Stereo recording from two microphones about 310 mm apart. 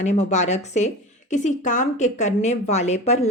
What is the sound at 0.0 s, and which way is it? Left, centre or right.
A woman's voice, left.